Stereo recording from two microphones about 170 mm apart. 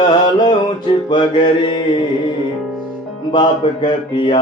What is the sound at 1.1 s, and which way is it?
Mantra, 30° left (ahead or behind).